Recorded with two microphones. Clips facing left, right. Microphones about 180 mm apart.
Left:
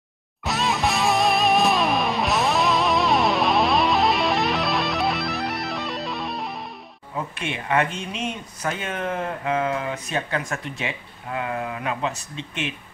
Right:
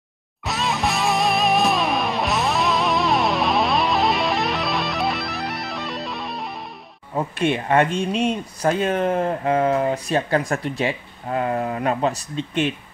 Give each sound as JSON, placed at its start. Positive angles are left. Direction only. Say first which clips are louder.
{"t": 0.4, "sound": "music", "louder": "even", "side_deg": 0}
{"t": 7.2, "sound": "speech", "louder": "right 8 dB", "side_deg": -35}